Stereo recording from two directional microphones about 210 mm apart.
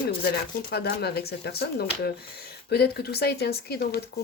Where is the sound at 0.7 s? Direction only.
50° left (ahead or behind).